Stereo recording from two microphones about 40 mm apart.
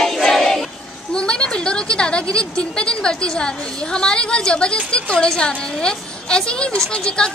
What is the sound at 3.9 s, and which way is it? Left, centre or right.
A woman's voice, left.